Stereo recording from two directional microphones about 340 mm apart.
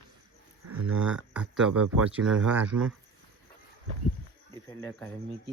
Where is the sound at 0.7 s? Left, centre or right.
Right.